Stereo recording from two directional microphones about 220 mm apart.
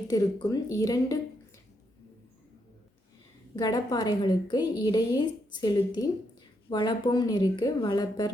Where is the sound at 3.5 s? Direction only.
15° left (ahead or behind).